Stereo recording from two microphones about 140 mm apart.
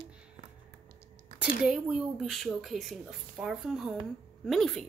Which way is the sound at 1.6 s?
5° right (ahead or behind).